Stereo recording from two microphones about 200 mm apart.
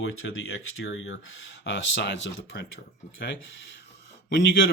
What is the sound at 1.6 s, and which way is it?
Speech, 65° left (ahead or behind).